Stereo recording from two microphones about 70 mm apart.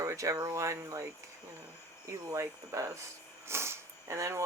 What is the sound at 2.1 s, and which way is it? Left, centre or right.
Speech, right.